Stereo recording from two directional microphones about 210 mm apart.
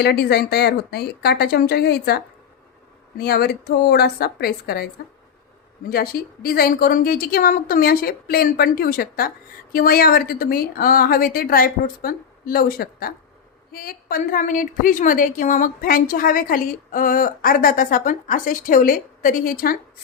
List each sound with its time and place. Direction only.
0.0 s a woman's voice: 50° left (ahead or behind)
5.9 s a woman's voice: 45° left (ahead or behind)